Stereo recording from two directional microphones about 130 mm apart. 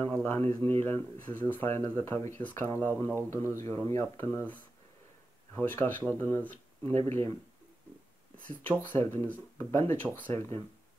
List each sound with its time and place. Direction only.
0.0 s speech: 15° left (ahead or behind)
8.5 s speech: 15° left (ahead or behind)